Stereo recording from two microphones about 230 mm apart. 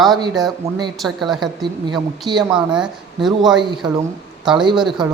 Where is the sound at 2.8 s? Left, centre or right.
Centre.